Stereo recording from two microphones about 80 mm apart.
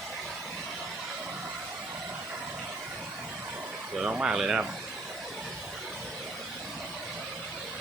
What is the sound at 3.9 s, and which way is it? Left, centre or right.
Speech, centre.